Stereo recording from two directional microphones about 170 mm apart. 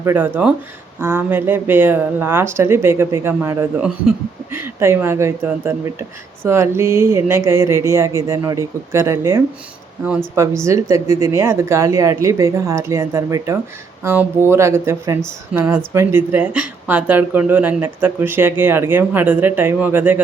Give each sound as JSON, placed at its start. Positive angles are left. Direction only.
{"t": 0.0, "sound": "speech", "side_deg": -15}